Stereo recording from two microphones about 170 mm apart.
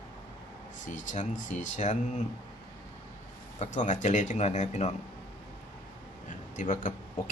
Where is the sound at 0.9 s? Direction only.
45° left (ahead or behind).